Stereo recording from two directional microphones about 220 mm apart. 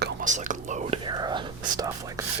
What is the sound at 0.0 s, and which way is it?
Whispering, 35° right (ahead or behind).